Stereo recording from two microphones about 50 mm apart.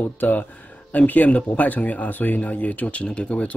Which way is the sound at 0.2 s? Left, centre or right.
Left.